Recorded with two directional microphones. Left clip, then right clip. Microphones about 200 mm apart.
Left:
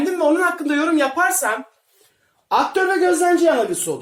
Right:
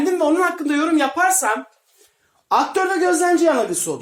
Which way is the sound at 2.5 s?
30° right (ahead or behind).